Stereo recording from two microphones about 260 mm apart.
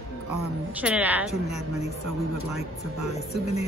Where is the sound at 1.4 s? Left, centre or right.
Left.